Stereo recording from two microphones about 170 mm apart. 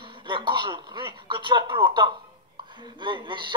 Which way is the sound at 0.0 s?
30° right (ahead or behind).